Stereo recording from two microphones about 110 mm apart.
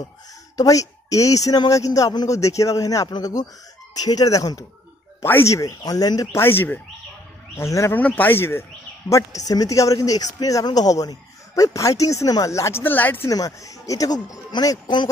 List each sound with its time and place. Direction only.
0.6 s speech: 30° left (ahead or behind)
6.4 s speech: 20° left (ahead or behind)
9.1 s speech: 30° left (ahead or behind)
13.3 s speech: 30° left (ahead or behind)